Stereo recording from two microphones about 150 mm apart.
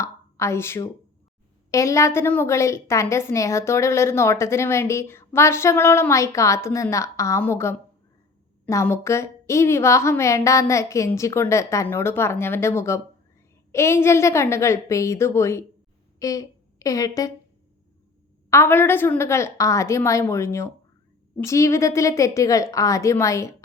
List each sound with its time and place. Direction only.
0.0 s a sound: 20° left (ahead or behind)
1.7 s a woman's voice: 20° left (ahead or behind)
18.5 s a woman's voice: 15° left (ahead or behind)